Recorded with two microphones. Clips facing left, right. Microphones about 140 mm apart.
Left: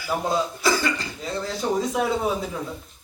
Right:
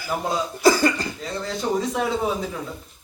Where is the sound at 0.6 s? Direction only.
45° right (ahead or behind).